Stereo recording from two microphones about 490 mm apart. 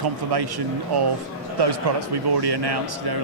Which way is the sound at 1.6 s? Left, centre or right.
Right.